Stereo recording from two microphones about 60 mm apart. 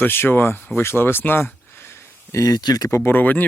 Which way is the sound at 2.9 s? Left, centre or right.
Left.